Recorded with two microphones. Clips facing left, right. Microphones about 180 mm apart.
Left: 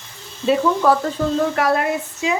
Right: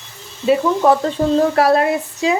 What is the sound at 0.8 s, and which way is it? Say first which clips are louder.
Speech: right 3 dB; 25° right (ahead or behind).